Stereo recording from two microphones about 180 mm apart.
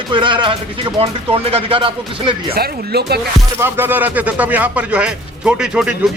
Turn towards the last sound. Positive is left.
turn(degrees=-5)  # may be behind; listen again after turning